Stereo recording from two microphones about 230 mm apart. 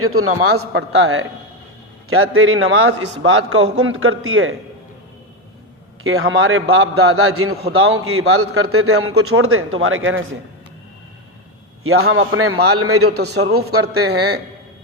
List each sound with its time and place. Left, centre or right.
0.0 s a man's voice: right
6.0 s a man's voice: right
11.8 s a man's voice: right
13.1 s a man's voice: right